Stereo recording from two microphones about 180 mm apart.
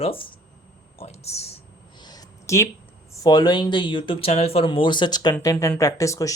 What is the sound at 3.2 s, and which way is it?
Speech, 25° left (ahead or behind).